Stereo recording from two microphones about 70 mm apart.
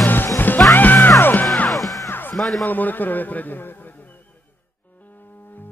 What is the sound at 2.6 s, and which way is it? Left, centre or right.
A man's voice, left.